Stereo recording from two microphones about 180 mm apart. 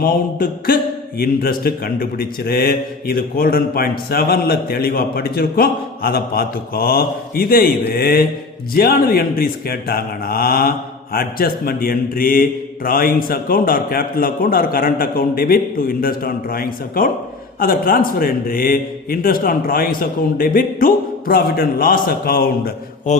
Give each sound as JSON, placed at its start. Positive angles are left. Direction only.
{"t": 0.0, "sound": "a man's voice", "side_deg": 50}